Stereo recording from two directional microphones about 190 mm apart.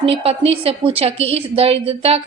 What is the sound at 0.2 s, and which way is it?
A woman's voice, 30° right (ahead or behind).